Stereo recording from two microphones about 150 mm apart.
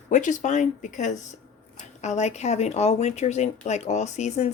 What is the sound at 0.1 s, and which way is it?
Speech, 55° left (ahead or behind).